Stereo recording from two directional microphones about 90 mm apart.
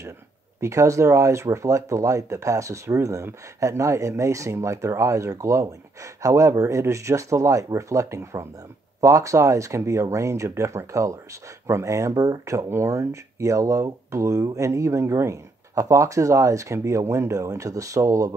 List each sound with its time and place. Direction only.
0.6 s speech: 35° right (ahead or behind)